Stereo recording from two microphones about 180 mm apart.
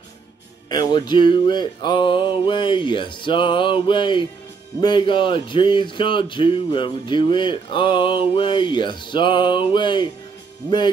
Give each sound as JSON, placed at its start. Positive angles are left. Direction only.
{"t": 0.7, "sound": "music", "side_deg": 25}